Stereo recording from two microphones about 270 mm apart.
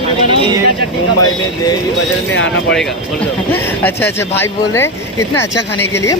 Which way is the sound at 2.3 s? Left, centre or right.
Left.